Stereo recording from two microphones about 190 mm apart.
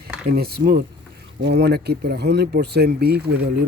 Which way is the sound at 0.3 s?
55° right (ahead or behind).